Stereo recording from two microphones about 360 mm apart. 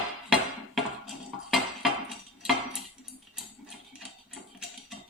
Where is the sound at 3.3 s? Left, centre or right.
Centre.